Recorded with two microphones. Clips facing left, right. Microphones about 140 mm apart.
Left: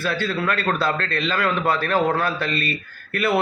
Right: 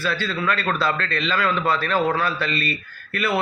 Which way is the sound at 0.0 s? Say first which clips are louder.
Left 1 dB; 50° left (ahead or behind).